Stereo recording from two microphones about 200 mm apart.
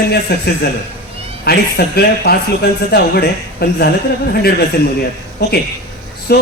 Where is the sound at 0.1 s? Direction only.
55° left (ahead or behind).